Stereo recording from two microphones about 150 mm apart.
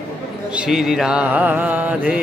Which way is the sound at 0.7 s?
Centre (ahead or behind).